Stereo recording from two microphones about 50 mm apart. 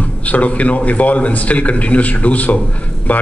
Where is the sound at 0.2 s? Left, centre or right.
Left.